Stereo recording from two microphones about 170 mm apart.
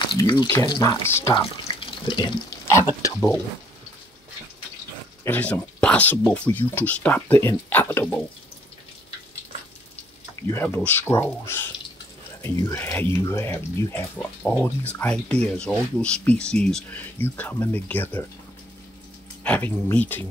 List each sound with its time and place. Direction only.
0.0 s speech: 25° left (ahead or behind)
1.8 s water tap: 30° left (ahead or behind)
5.2 s speech: 10° left (ahead or behind)
10.5 s speech: 15° left (ahead or behind)
19.4 s speech: 10° left (ahead or behind)